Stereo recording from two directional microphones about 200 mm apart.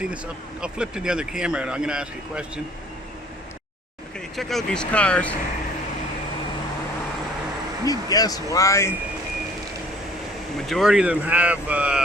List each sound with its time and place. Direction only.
0.6 s speech: 5° right (ahead or behind)
4.4 s speech: centre (ahead or behind)
7.9 s speech: 20° left (ahead or behind)
10.7 s speech: centre (ahead or behind)